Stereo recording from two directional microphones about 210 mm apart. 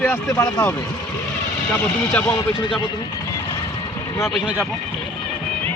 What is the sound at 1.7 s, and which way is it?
Speech, 10° left (ahead or behind).